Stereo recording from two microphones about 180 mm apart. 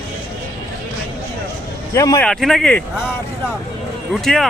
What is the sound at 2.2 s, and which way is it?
Speech, 5° left (ahead or behind).